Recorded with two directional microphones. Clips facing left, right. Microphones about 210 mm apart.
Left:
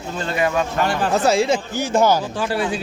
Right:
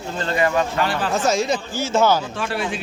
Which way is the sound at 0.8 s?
45° left (ahead or behind).